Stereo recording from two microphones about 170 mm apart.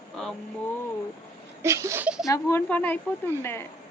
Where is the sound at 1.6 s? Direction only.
15° right (ahead or behind).